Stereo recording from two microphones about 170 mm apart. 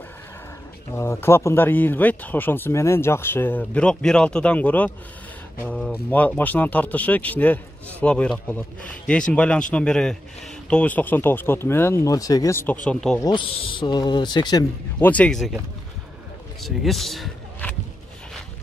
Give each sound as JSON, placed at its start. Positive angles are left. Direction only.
{"t": 0.9, "sound": "speech", "side_deg": 15}
{"t": 12.8, "sound": "speech", "side_deg": 5}
{"t": 13.2, "sound": "speech", "side_deg": 30}
{"t": 15.0, "sound": "speech", "side_deg": 10}
{"t": 16.6, "sound": "speech", "side_deg": 0}